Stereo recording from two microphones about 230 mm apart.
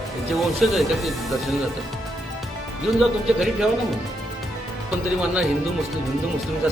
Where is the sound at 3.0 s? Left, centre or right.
Centre.